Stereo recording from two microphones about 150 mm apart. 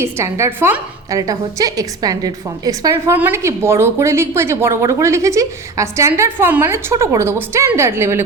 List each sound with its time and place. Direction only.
0.0 s a woman's voice: 20° right (ahead or behind)